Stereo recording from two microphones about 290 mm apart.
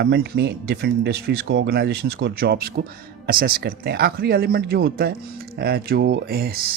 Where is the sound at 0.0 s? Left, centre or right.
Right.